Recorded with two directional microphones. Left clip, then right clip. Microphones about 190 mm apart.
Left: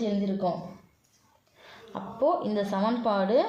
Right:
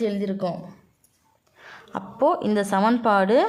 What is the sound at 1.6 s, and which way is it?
A woman's voice, 40° right (ahead or behind).